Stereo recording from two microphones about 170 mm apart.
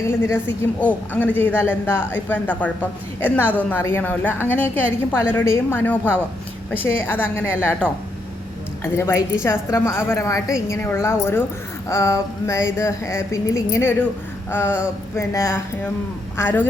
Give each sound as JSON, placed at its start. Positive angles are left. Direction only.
{"t": 0.3, "sound": "a woman's voice", "side_deg": 10}